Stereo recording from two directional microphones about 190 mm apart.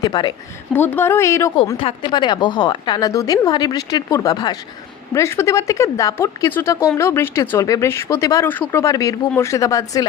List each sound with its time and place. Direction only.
0.0 s a woman's voice: 20° left (ahead or behind)
0.7 s speech: 10° left (ahead or behind)
1.8 s a woman's voice: 25° left (ahead or behind)